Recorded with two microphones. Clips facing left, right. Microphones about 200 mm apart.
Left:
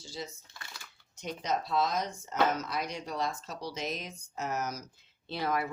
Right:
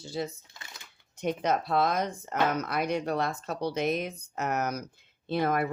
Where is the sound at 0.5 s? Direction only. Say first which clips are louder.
Even; 20° right (ahead or behind).